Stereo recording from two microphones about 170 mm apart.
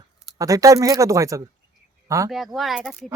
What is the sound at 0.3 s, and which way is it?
Speech, 20° right (ahead or behind).